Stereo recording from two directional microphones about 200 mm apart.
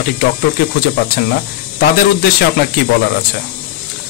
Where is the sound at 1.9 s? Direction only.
50° left (ahead or behind).